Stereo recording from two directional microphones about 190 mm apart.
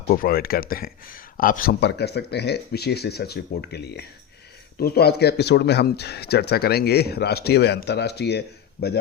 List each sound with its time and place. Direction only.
0.1 s speech: 50° left (ahead or behind)